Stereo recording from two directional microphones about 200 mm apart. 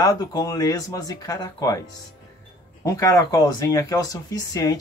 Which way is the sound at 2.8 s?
15° left (ahead or behind).